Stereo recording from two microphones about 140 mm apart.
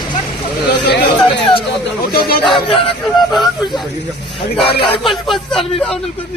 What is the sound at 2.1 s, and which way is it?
Speech, 90° left.